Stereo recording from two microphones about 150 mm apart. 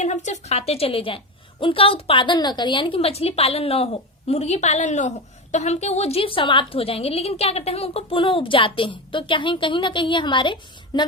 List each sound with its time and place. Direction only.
0.0 s a woman's voice: 50° left (ahead or behind); by 11.0 s 35° left (ahead or behind)